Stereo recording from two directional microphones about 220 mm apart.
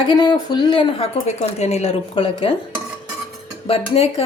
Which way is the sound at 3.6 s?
25° left (ahead or behind).